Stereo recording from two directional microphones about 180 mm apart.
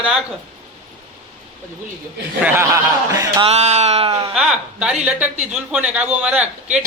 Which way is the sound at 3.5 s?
35° right (ahead or behind).